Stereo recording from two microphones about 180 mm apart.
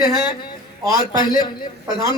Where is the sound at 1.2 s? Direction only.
25° left (ahead or behind).